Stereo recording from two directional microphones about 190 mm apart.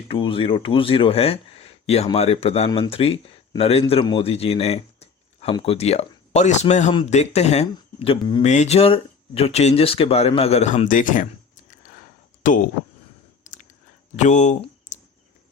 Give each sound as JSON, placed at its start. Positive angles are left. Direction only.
{"t": 0.1, "sound": "speech", "side_deg": 30}
{"t": 13.4, "sound": "chewing", "side_deg": 40}
{"t": 14.2, "sound": "speech", "side_deg": 40}